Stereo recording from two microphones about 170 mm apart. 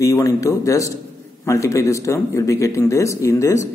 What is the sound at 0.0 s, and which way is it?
Speech, 20° left (ahead or behind).